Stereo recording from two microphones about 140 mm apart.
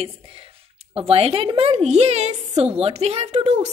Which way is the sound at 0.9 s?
45° right (ahead or behind).